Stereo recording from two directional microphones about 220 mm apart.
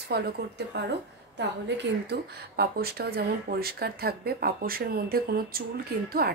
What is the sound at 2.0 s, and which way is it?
Speech, 45° right (ahead or behind).